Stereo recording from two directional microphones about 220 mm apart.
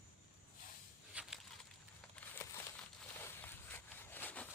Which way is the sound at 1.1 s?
5° right (ahead or behind).